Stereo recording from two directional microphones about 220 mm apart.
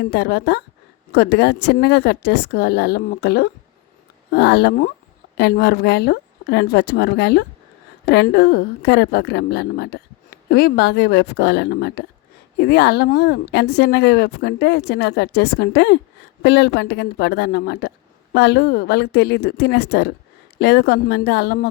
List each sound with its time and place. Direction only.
0.0 s a woman's voice: 50° left (ahead or behind)